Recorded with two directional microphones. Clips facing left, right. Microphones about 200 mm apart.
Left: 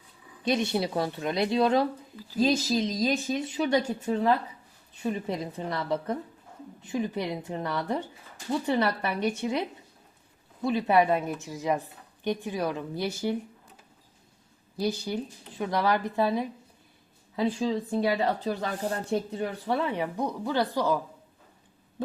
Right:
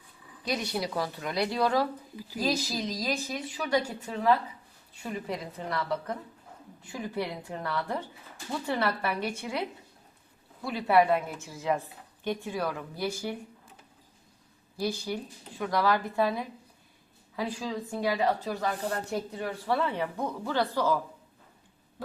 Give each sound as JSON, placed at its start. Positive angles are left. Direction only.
{"t": 0.4, "sound": "a woman's voice", "side_deg": 25}
{"t": 14.8, "sound": "a woman's voice", "side_deg": 20}
{"t": 19.1, "sound": "speech", "side_deg": 25}